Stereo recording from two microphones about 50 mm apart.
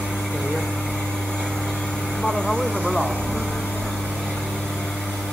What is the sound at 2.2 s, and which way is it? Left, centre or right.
Speech, centre.